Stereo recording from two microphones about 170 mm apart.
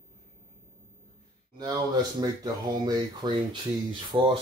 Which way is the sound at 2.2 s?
25° right (ahead or behind).